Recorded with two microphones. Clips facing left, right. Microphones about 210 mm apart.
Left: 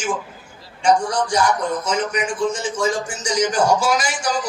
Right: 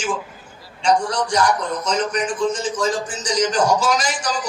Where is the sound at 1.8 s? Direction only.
10° left (ahead or behind).